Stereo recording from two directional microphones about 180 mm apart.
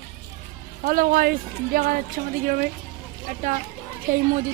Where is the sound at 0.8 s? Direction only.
50° right (ahead or behind).